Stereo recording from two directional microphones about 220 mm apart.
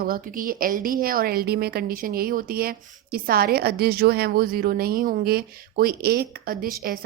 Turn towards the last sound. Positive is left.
turn(degrees=-40)  # may be behind; listen again after turning